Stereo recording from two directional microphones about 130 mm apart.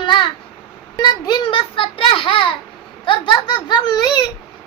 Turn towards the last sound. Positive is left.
turn(degrees=35)  # may be behind; listen again after turning